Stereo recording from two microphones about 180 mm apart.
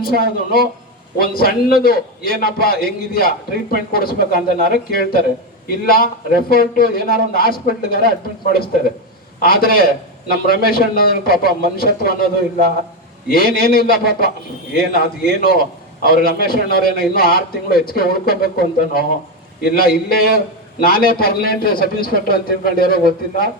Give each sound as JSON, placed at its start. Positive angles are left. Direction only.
{"t": 0.0, "sound": "a man's voice", "side_deg": 55}
{"t": 9.4, "sound": "a man's voice", "side_deg": 55}